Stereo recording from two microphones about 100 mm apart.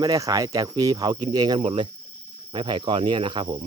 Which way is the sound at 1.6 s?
65° right (ahead or behind).